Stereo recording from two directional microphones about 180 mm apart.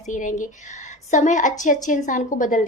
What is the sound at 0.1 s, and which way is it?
A woman's voice, 45° left (ahead or behind).